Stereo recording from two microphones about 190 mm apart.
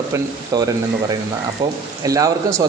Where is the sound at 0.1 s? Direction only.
20° right (ahead or behind).